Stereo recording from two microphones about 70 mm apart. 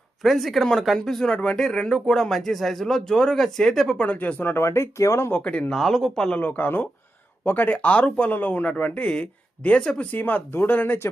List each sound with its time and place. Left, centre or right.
0.2 s speech: centre
4.0 s speech: left
4.6 s speech: left
5.4 s speech: centre
6.4 s speech: left
10.1 s speech: left